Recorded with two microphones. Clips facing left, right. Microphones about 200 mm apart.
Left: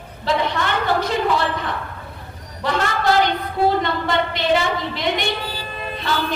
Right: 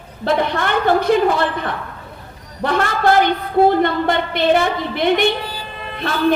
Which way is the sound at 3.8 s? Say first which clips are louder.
Right 4 dB; 55° right (ahead or behind).